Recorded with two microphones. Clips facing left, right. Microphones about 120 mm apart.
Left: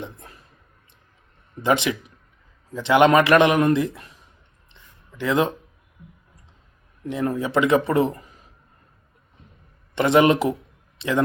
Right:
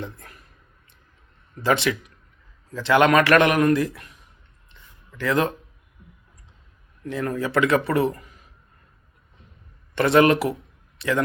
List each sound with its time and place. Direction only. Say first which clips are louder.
0.0 s a man's voice: right 1 dB; 20° left (ahead or behind)
1.6 s a man's voice: left 1 dB; 20° left (ahead or behind)
4.7 s a sound: even; 25° left (ahead or behind)
7.0 s a man's voice: left 2 dB; 20° left (ahead or behind)
9.9 s a man's voice: even; 20° left (ahead or behind)